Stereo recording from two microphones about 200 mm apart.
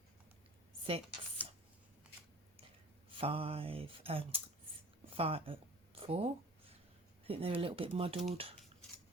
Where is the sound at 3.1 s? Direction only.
30° right (ahead or behind).